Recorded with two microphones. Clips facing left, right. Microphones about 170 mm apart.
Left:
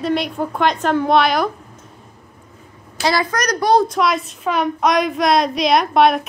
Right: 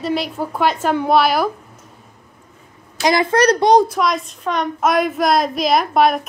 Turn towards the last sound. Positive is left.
turn(degrees=0)  # may be behind; listen again after turning